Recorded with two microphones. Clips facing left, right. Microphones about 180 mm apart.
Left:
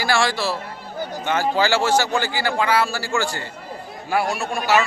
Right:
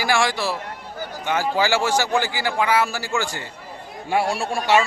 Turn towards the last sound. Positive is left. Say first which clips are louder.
# right 1 dB
turn(degrees=-30)  # may be behind; listen again after turning